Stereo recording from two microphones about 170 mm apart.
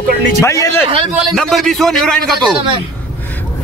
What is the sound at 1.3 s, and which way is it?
Speech, centre (ahead or behind).